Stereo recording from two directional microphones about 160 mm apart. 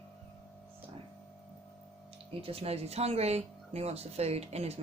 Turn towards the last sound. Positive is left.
turn(degrees=-40)  # may be behind; listen again after turning